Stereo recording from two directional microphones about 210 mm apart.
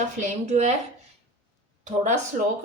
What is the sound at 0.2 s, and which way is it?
Speech, 35° right (ahead or behind).